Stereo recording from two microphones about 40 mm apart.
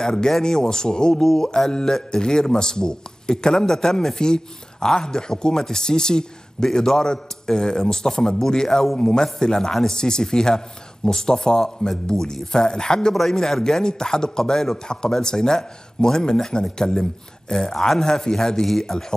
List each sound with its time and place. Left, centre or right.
0.0 s speech: centre
8.6 s speech: centre
8.9 s speech: centre